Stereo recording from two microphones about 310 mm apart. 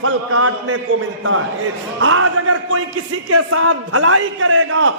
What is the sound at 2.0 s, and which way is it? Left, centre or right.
A man's voice, right.